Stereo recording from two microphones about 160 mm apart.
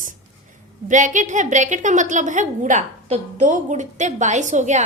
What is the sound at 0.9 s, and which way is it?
A woman's voice, 50° right (ahead or behind).